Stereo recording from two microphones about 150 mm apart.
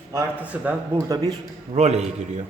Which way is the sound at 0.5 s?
10° right (ahead or behind).